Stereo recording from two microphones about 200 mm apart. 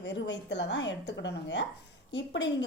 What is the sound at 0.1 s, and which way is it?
A woman's voice, 60° left (ahead or behind).